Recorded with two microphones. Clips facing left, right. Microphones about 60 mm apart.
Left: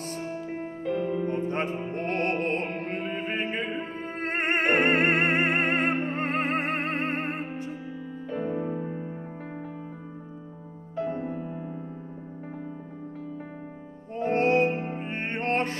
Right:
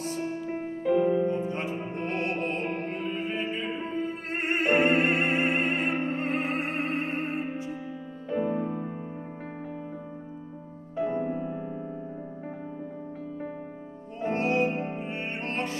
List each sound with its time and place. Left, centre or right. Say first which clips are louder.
0.5 s music: right 5 dB; centre
1.5 s music: left 3 dB; left
8.3 s music: right 2 dB; centre
11.0 s music: right 2 dB; centre
14.3 s music: left 3 dB; left